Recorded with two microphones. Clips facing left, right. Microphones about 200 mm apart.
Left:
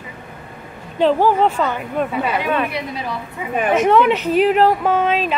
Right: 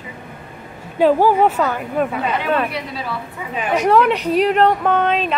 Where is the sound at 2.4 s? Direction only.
15° left (ahead or behind).